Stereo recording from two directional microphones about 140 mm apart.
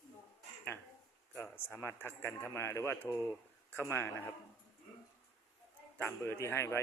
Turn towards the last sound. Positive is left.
turn(degrees=20)  # may be behind; listen again after turning